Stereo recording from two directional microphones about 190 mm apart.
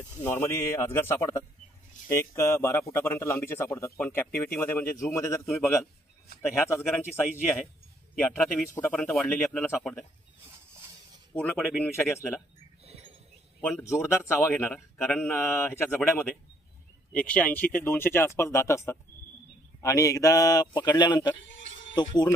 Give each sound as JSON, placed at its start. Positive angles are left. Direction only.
{"t": 0.2, "sound": "speech", "side_deg": 10}
{"t": 6.7, "sound": "speech", "side_deg": 10}
{"t": 11.3, "sound": "speech", "side_deg": 10}
{"t": 12.8, "sound": "a sound", "side_deg": -35}
{"t": 13.6, "sound": "a man's voice", "side_deg": 5}